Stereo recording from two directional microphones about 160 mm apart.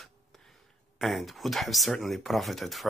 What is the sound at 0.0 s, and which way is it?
Speech, centre (ahead or behind).